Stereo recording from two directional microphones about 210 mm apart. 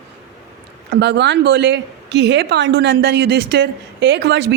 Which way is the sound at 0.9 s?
55° right (ahead or behind).